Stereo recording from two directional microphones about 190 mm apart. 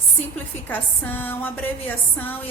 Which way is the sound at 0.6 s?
10° left (ahead or behind).